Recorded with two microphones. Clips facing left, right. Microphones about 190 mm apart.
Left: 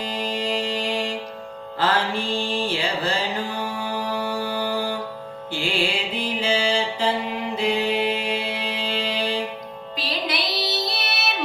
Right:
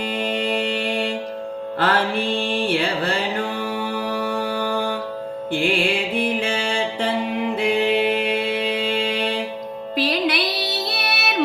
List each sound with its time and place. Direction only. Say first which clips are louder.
0.1 s music: right 3 dB; 60° right (ahead or behind)
7.6 s mantra: right 3 dB; 55° right (ahead or behind)
9.9 s music: right 7 dB; 60° right (ahead or behind)